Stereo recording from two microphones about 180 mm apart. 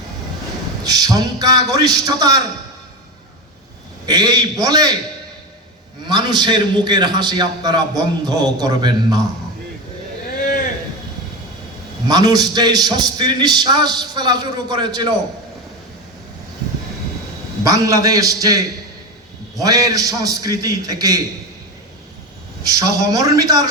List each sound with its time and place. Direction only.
0.9 s a man's voice: 20° right (ahead or behind)
4.0 s a man's voice: 20° right (ahead or behind)
6.1 s a man's voice: 25° right (ahead or behind)
12.0 s a man's voice: 20° right (ahead or behind)
17.6 s a man's voice: 20° right (ahead or behind)
22.7 s a man's voice: 20° right (ahead or behind)